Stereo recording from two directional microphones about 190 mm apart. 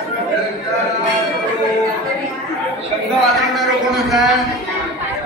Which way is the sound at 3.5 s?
Centre (ahead or behind).